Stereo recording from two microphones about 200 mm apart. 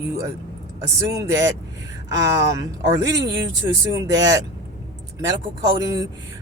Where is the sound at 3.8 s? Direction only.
15° right (ahead or behind).